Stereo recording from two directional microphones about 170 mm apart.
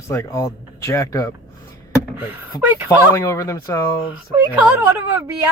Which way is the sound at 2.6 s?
10° right (ahead or behind).